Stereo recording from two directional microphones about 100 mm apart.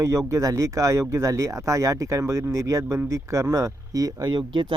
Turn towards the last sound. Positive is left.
turn(degrees=-50)  # may be behind; listen again after turning